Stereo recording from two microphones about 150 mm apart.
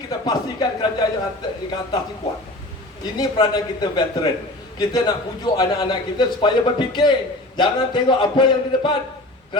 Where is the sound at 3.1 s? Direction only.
30° left (ahead or behind).